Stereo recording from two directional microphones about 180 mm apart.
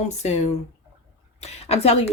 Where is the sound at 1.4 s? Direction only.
35° left (ahead or behind).